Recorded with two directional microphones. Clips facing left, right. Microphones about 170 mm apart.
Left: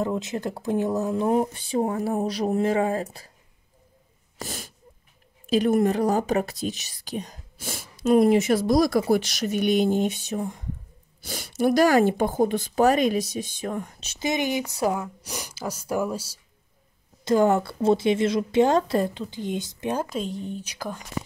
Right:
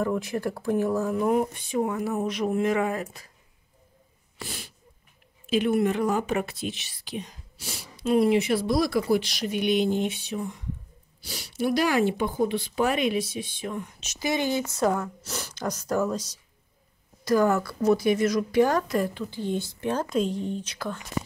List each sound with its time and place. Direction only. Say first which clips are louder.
0.0 s speech: even; 20° left (ahead or behind)
4.4 s wheeze: left 3 dB; 45° left (ahead or behind)
5.5 s speech: left 3 dB; 40° left (ahead or behind)
14.2 s speech: left 1 dB; 15° left (ahead or behind)
17.2 s speech: left 2 dB; 25° left (ahead or behind)
20.1 s speech: right 4 dB; centre (ahead or behind)
20.6 s speech: even; 15° left (ahead or behind)